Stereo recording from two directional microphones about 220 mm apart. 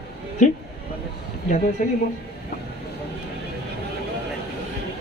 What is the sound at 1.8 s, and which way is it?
Speech, 35° left (ahead or behind).